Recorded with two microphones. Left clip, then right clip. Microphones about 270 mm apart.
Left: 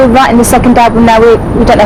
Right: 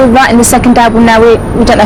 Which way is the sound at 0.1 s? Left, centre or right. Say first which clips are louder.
Even; centre.